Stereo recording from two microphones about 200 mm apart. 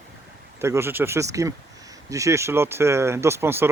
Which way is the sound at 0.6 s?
15° right (ahead or behind).